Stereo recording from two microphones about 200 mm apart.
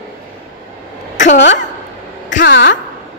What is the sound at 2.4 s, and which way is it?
Speech, 60° left (ahead or behind).